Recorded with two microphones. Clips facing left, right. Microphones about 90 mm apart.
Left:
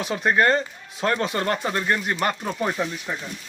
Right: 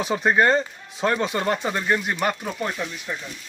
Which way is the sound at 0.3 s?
15° right (ahead or behind).